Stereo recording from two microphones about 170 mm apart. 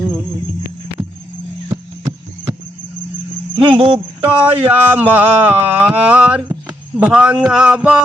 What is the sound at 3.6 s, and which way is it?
Speech, 30° right (ahead or behind).